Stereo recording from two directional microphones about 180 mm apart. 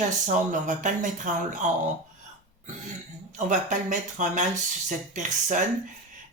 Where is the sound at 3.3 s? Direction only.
45° right (ahead or behind).